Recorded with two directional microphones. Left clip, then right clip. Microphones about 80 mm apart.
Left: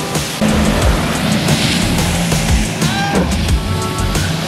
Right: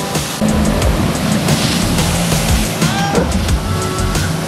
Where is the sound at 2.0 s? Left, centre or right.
Centre.